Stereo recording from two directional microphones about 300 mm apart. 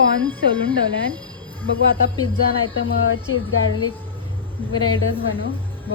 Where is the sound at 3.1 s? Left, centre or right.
Left.